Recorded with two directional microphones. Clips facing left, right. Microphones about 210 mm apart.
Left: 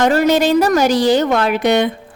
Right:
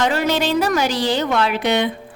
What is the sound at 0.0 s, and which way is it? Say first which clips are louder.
A woman's voice: left 6 dB; 45° left (ahead or behind).